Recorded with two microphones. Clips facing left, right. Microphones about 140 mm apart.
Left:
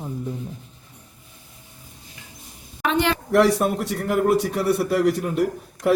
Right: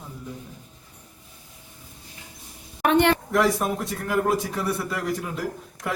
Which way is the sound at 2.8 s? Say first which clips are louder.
Right 3 dB; 55° right (ahead or behind).